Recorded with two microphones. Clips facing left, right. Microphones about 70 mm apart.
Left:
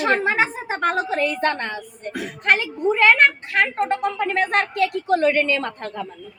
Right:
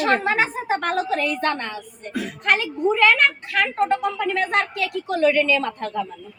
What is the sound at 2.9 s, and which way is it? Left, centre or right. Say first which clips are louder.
A woman's voice: left 3 dB; left.